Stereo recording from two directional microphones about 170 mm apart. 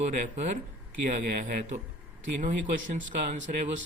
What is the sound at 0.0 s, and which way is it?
Speech, 45° right (ahead or behind).